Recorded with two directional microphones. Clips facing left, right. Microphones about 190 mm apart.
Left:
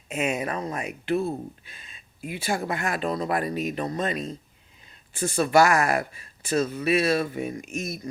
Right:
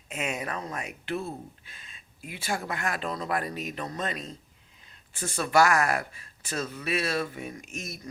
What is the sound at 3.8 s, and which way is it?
Speech, 15° left (ahead or behind).